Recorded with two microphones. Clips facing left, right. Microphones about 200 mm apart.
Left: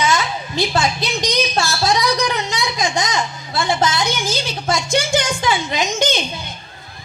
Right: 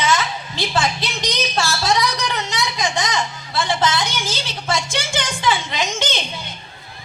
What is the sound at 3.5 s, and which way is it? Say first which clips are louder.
A woman's voice: left 1 dB; 45° left (ahead or behind).